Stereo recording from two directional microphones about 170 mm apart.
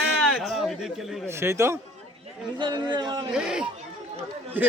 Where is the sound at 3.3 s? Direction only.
5° right (ahead or behind).